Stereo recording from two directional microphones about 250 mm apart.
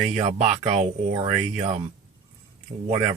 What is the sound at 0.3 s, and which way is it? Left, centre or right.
Speech, right.